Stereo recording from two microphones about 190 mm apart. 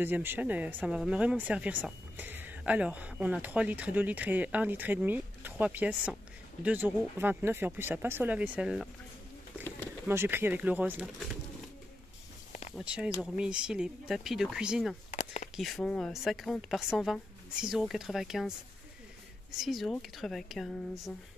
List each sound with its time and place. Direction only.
0.0 s speech: 10° right (ahead or behind)
10.0 s speech: 10° right (ahead or behind)
12.7 s speech: 5° right (ahead or behind)
15.0 s a sound: 35° left (ahead or behind)
15.5 s speech: centre (ahead or behind)
19.5 s speech: centre (ahead or behind)